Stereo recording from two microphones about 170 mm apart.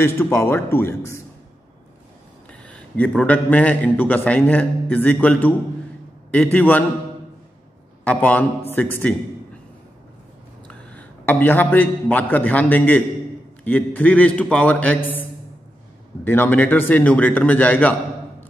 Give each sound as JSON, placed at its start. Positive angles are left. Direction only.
{"t": 0.0, "sound": "a man's voice", "side_deg": 15}
{"t": 2.6, "sound": "a man's voice", "side_deg": 5}
{"t": 8.0, "sound": "a man's voice", "side_deg": 10}
{"t": 10.7, "sound": "a man's voice", "side_deg": 10}
{"t": 16.3, "sound": "a man's voice", "side_deg": 10}